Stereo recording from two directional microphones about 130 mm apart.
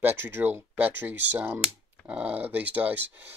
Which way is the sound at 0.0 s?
15° right (ahead or behind).